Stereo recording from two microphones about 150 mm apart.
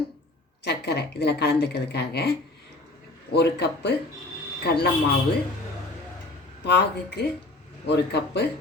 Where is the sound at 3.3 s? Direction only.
90° left.